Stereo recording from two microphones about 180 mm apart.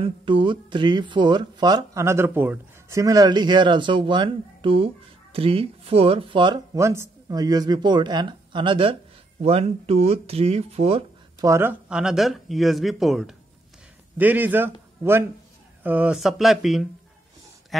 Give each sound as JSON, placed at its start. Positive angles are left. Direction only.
{"t": 0.0, "sound": "speech", "side_deg": -25}
{"t": 11.4, "sound": "speech", "side_deg": -15}
{"t": 11.9, "sound": "a man's voice", "side_deg": -5}